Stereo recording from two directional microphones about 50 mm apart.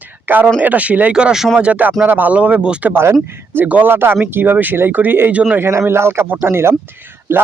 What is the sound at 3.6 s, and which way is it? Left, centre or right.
Speech, right.